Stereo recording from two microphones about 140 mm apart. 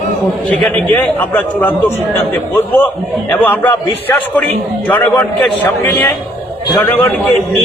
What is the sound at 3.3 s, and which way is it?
A man's voice, 15° left (ahead or behind).